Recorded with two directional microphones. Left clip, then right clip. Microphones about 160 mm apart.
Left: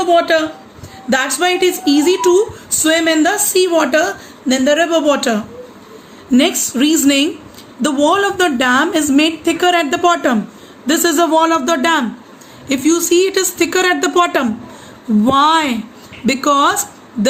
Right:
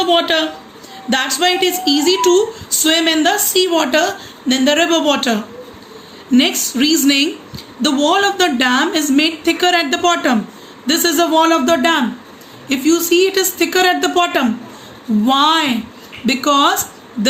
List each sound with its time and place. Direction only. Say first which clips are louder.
0.0 s a woman's voice: left 2 dB; 50° left (ahead or behind); by 16.8 s 65° left (ahead or behind)